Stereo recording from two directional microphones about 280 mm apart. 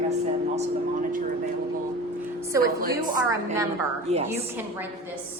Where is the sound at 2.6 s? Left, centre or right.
Right.